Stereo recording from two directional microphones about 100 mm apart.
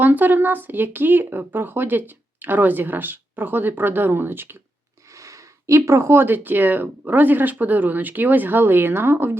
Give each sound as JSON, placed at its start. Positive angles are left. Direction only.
{"t": 0.0, "sound": "speech", "side_deg": -20}